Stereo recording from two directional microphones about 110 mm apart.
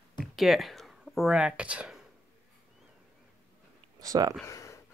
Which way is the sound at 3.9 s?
35° right (ahead or behind).